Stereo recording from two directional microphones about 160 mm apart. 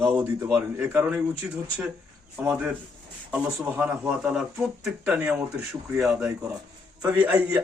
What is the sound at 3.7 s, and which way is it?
A man's voice, 10° right (ahead or behind).